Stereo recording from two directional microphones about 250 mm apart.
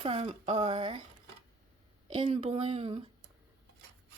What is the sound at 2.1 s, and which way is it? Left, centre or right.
Speech, right.